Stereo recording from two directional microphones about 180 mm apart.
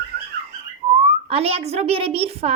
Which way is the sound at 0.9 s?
35° right (ahead or behind).